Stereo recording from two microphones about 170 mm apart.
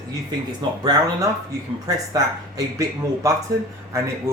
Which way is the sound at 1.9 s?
20° right (ahead or behind).